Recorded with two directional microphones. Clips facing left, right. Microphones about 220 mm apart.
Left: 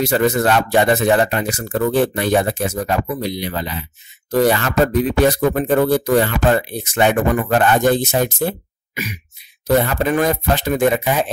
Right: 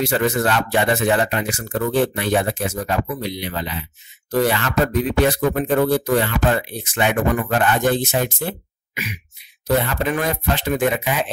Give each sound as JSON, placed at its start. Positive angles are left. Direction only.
{"t": 0.0, "sound": "speech", "side_deg": 40}